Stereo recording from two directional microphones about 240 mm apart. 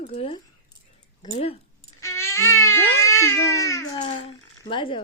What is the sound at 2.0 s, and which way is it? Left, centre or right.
Baby cry, centre.